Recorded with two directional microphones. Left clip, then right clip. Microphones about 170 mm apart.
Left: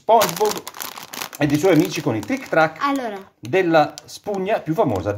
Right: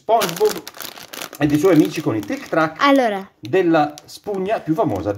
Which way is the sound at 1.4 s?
25° left (ahead or behind).